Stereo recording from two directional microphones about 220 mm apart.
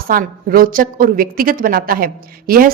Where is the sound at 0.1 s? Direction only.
40° right (ahead or behind).